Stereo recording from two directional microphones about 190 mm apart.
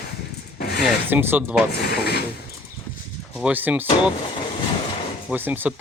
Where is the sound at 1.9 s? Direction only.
60° left (ahead or behind).